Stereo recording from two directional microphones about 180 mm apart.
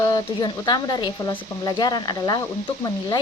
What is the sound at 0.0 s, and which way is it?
Speech, 20° left (ahead or behind).